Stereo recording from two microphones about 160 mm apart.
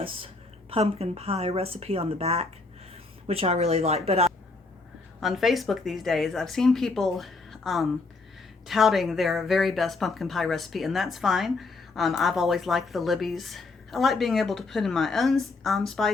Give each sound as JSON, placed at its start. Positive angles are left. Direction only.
{"t": 0.0, "sound": "a woman's voice", "side_deg": -35}
{"t": 5.2, "sound": "speech", "side_deg": 0}